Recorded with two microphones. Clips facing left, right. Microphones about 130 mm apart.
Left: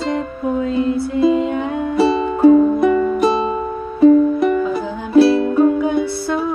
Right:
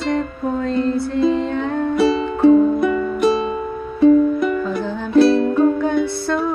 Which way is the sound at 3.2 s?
35° left (ahead or behind).